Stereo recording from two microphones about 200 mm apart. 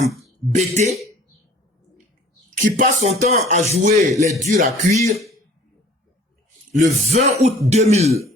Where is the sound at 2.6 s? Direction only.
35° right (ahead or behind).